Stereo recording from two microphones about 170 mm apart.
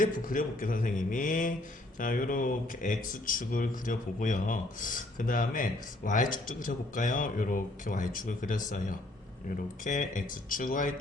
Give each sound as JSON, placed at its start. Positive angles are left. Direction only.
{"t": 0.0, "sound": "speech", "side_deg": 55}